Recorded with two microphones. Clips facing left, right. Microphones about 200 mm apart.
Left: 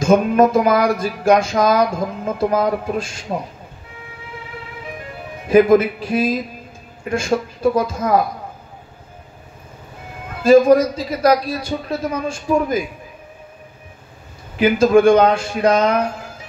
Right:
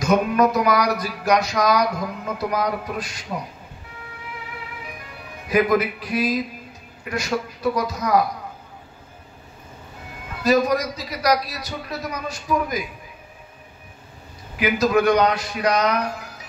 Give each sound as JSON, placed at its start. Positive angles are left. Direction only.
{"t": 0.0, "sound": "music", "side_deg": 25}
{"t": 5.5, "sound": "music", "side_deg": 25}
{"t": 10.4, "sound": "music", "side_deg": 25}
{"t": 14.6, "sound": "music", "side_deg": 25}